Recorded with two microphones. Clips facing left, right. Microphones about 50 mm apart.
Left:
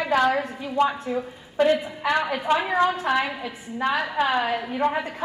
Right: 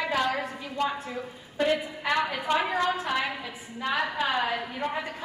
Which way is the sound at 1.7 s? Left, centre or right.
Centre.